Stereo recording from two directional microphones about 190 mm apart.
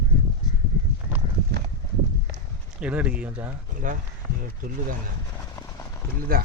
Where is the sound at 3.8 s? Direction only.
45° right (ahead or behind).